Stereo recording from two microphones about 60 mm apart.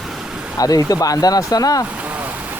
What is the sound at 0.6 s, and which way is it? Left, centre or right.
Speech, left.